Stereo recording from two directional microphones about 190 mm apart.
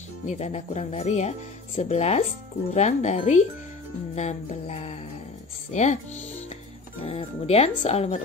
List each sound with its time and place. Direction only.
0.3 s speech: 35° left (ahead or behind)
7.0 s speech: 30° left (ahead or behind)